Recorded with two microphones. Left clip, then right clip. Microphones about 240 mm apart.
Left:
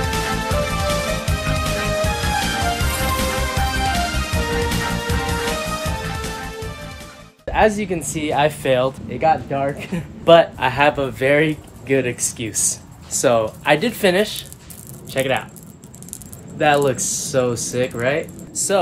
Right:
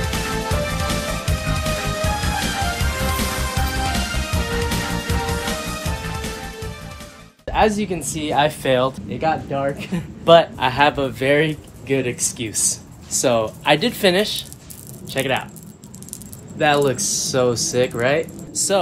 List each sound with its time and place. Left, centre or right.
0.0 s music: centre
7.4 s speech: centre
16.5 s speech: centre
18.5 s speech: centre